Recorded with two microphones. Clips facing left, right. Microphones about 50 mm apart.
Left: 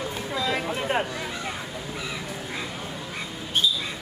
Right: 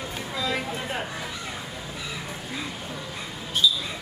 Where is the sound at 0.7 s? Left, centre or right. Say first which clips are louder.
Left 5 dB; left.